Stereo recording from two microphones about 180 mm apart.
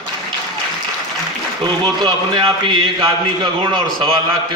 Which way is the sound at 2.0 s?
25° right (ahead or behind).